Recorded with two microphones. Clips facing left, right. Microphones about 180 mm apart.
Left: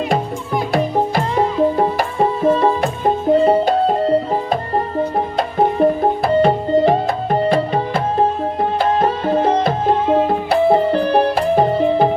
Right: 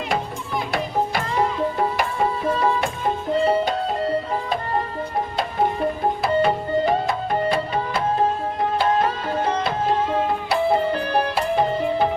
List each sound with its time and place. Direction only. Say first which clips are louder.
1.1 s music: left 5 dB; 40° left (ahead or behind)
10.2 s music: left 6 dB; 45° left (ahead or behind)